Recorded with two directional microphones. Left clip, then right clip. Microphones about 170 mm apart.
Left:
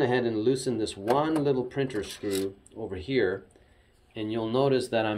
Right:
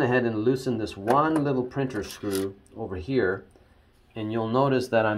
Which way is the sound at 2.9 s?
50° right (ahead or behind).